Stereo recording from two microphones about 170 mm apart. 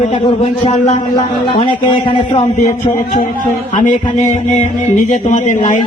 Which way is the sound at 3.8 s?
45° left (ahead or behind).